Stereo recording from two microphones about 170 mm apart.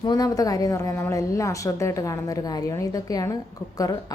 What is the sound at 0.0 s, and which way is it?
A woman's voice, 25° left (ahead or behind).